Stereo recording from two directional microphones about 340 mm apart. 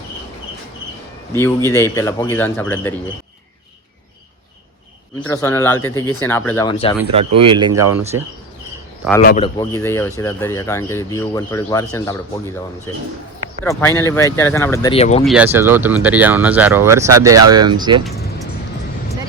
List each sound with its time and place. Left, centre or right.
1.3 s speech: centre
5.2 s speech: centre
7.3 s speech: centre
9.2 s speech: left
9.6 s speech: centre
13.7 s speech: centre
15.2 s speech: centre